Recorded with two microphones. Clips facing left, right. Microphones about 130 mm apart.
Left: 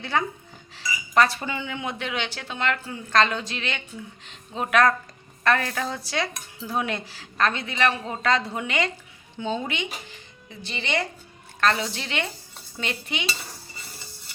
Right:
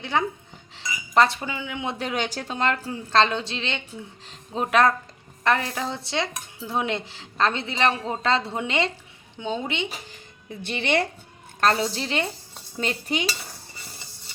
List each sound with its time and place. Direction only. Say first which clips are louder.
0.0 s dishes: right 1 dB; 20° right (ahead or behind)
1.1 s speech: right 1 dB; 25° right (ahead or behind)
1.4 s speech: left 1 dB; 10° right (ahead or behind)
2.0 s dishes: right 3 dB; 40° right (ahead or behind)
9.4 s speech: even; 15° right (ahead or behind)
10.6 s speech: right 4 dB; 60° right (ahead or behind)
11.6 s a woman's voice: right 2 dB; 35° right (ahead or behind)